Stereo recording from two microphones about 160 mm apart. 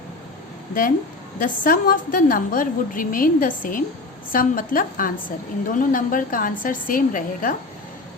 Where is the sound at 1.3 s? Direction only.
60° left (ahead or behind).